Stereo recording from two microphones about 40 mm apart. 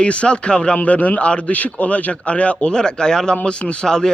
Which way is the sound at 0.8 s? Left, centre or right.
Left.